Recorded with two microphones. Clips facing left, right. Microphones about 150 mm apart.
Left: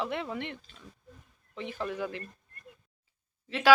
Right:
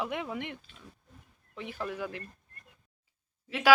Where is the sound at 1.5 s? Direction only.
5° right (ahead or behind).